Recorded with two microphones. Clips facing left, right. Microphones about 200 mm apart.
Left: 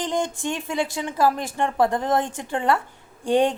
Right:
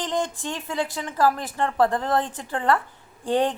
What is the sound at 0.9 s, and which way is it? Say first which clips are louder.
A woman's voice: even; 20° left (ahead or behind).